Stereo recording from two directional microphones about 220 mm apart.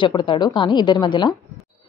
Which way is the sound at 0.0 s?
20° left (ahead or behind).